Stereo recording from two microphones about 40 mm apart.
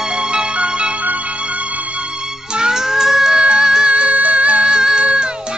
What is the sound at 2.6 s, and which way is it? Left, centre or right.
Music, centre.